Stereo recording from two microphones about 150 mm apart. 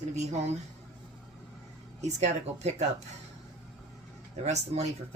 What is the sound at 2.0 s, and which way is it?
Speech, 50° right (ahead or behind).